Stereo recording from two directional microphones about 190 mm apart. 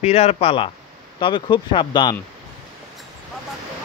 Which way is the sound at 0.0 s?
35° left (ahead or behind).